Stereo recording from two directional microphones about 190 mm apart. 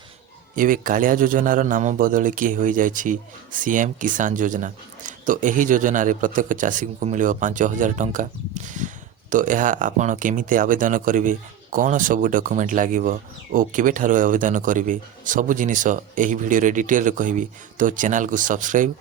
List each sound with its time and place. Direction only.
0.5 s speech: 45° right (ahead or behind)